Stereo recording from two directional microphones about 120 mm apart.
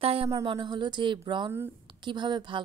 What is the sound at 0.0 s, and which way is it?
Speech, 55° right (ahead or behind).